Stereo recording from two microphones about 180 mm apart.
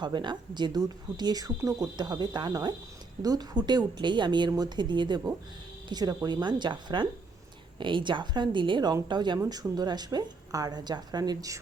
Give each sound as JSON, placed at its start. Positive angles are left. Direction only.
{"t": 0.0, "sound": "speech", "side_deg": -25}